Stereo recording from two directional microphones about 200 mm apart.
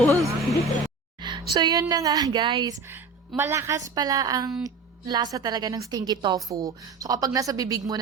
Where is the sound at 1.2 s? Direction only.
20° right (ahead or behind).